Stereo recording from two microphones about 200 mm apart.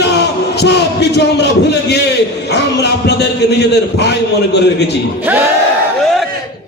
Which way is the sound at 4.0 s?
55° left (ahead or behind).